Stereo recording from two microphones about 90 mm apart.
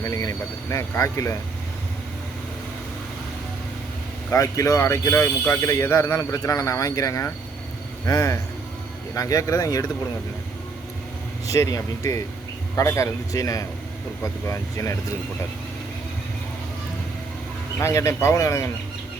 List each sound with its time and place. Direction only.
0.0 s speech: 35° left (ahead or behind)
4.3 s speech: 35° left (ahead or behind)
11.4 s speech: 35° left (ahead or behind)
17.7 s speech: 30° left (ahead or behind)